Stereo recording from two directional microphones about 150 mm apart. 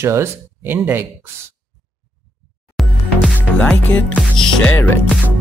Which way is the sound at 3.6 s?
10° left (ahead or behind).